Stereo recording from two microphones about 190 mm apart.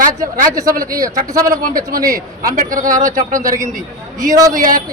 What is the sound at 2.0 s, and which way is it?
Speech, 20° right (ahead or behind).